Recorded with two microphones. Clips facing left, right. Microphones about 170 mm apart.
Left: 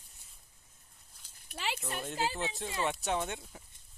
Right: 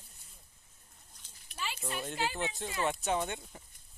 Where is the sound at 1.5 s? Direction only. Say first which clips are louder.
Left 3 dB; 60° left (ahead or behind).